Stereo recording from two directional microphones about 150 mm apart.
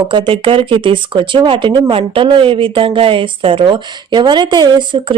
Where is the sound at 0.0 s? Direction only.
35° right (ahead or behind).